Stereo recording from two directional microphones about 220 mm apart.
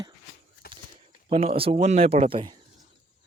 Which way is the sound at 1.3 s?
25° right (ahead or behind).